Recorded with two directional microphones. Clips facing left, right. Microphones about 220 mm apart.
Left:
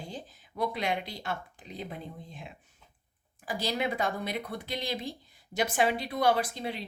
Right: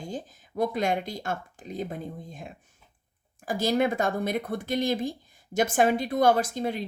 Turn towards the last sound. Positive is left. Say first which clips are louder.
# right 5 dB
turn(degrees=-45)  # may be behind; listen again after turning